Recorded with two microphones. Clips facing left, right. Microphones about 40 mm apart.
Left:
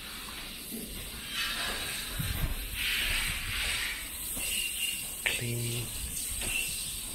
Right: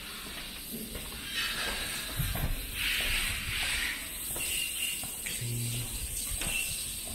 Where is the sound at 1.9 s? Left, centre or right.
Right.